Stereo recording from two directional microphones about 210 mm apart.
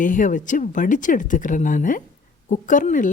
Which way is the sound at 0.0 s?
40° left (ahead or behind).